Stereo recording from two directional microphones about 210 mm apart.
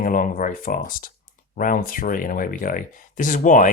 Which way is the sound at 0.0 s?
40° left (ahead or behind).